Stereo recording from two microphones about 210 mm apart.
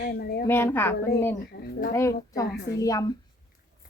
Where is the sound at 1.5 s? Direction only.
45° left (ahead or behind).